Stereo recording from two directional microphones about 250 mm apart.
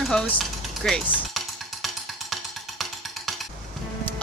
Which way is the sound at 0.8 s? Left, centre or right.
Centre.